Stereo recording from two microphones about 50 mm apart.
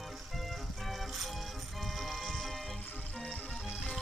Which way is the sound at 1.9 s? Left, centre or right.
Centre.